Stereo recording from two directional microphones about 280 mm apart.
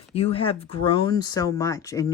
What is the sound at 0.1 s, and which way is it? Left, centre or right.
Speech, left.